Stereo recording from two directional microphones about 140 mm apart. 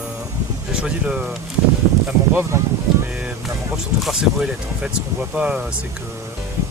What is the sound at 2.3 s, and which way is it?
Speech, 15° right (ahead or behind).